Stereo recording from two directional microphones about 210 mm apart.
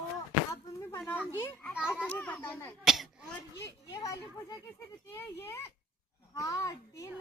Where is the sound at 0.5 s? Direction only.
15° left (ahead or behind).